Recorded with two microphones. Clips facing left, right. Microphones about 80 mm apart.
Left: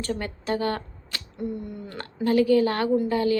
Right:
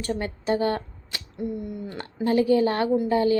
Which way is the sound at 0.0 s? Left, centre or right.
Right.